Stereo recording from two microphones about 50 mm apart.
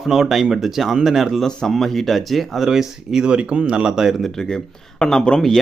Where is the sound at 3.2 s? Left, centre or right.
Centre.